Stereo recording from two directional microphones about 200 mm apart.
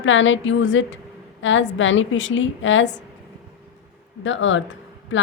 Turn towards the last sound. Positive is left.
turn(degrees=70)  # may be behind; listen again after turning